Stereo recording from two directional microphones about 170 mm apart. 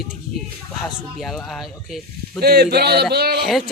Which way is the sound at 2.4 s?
70° right (ahead or behind).